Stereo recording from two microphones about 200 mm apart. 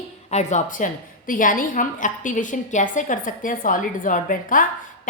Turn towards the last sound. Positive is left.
turn(degrees=40)  # may be behind; listen again after turning